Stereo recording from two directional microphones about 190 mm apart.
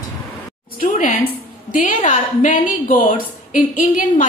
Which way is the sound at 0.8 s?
45° left (ahead or behind).